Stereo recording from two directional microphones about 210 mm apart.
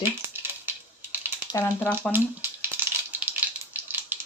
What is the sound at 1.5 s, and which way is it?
Speech, 10° left (ahead or behind).